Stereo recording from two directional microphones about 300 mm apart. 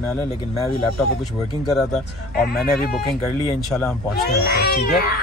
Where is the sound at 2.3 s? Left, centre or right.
Left.